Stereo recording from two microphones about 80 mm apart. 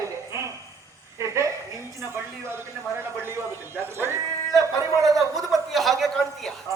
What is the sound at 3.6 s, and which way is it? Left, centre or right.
Music, right.